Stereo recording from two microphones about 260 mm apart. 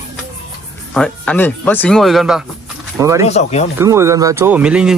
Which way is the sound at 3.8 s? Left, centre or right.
Centre.